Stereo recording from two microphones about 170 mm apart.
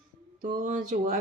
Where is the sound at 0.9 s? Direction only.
50° right (ahead or behind).